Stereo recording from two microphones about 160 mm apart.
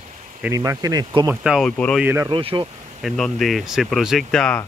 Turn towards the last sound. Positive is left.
turn(degrees=5)  # may be behind; listen again after turning